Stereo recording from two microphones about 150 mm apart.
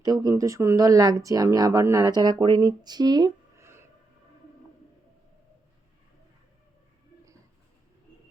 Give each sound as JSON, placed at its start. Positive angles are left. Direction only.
{"t": 0.0, "sound": "speech", "side_deg": -25}